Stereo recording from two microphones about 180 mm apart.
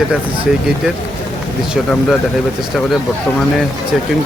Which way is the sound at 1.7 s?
Centre (ahead or behind).